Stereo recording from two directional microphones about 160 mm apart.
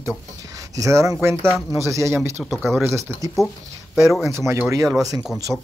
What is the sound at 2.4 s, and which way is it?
Speech, centre (ahead or behind).